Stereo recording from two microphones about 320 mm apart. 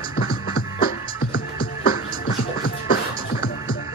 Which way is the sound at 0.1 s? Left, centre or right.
Left.